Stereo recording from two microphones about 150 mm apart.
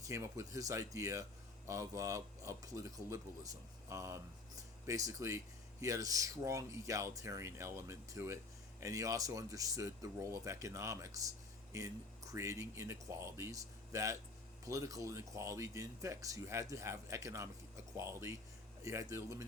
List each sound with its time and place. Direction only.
0.0 s speech: 20° right (ahead or behind)